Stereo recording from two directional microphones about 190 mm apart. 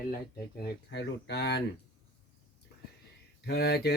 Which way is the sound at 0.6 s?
70° left (ahead or behind).